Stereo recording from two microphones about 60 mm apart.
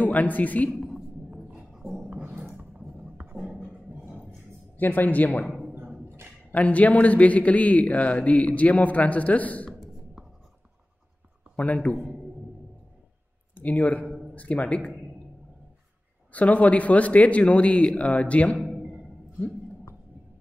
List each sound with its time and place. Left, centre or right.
0.0 s a man's voice: left
0.7 s a sound: centre
1.5 s a sound: centre
4.7 s a man's voice: left
6.5 s a man's voice: left
10.2 s writing: centre
11.5 s a man's voice: left
13.6 s a man's voice: left
16.3 s a man's voice: left